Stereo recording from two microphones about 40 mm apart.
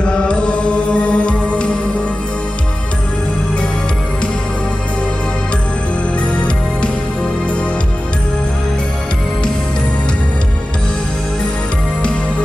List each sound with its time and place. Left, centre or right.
0.0 s music: left
6.3 s music: left